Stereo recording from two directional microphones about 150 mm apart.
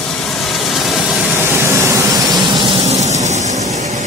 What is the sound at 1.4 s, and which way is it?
Vehicle, 15° right (ahead or behind).